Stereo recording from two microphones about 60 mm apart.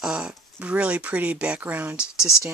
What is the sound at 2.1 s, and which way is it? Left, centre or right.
Speech, left.